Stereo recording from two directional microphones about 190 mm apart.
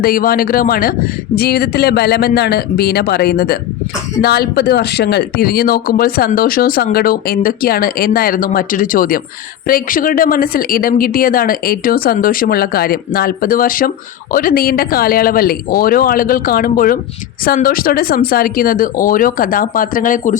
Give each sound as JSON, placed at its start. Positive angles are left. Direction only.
{"t": 0.0, "sound": "speech", "side_deg": 50}